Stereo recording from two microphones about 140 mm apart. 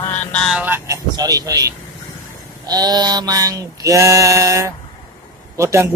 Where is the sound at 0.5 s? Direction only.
10° right (ahead or behind).